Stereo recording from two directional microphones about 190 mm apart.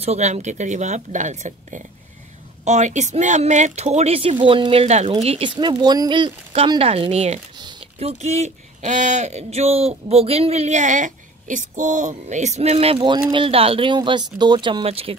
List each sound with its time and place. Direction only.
0.0 s speech: 35° right (ahead or behind)